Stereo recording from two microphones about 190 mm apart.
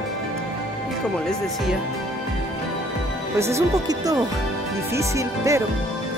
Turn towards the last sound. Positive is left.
turn(degrees=-15)  # may be behind; listen again after turning